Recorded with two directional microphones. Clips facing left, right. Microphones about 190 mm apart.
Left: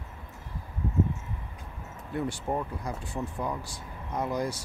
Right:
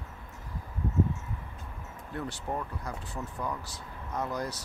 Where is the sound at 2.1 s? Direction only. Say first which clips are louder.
Left 5 dB; 15° left (ahead or behind).